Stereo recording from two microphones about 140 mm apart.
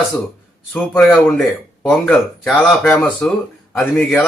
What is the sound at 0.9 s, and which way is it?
Speech, 10° left (ahead or behind).